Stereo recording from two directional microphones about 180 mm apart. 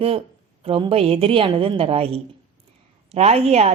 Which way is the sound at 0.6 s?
30° right (ahead or behind).